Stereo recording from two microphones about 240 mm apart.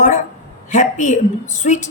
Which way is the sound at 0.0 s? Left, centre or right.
Left.